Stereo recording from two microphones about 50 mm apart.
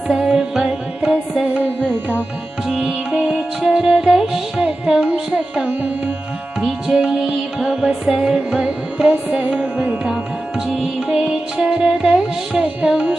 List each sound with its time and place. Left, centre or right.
0.1 s music: centre
2.6 s music: centre
9.4 s music: right
9.7 s music: right
12.9 s carnatic music: centre